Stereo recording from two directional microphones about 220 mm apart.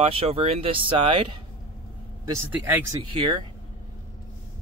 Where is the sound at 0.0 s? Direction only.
25° right (ahead or behind).